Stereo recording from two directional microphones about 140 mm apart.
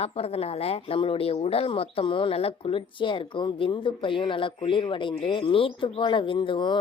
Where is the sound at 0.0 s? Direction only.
45° left (ahead or behind).